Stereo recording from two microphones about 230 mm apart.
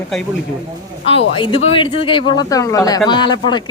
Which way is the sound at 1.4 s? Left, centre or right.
Left.